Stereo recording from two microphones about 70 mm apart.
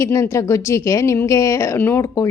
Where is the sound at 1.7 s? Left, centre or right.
Left.